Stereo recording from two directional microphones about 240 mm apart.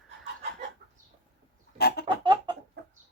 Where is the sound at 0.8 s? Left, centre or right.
Right.